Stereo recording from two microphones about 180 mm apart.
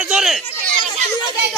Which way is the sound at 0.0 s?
5° right (ahead or behind).